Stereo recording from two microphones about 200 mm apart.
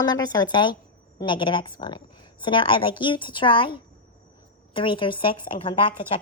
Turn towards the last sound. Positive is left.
turn(degrees=25)  # may be behind; listen again after turning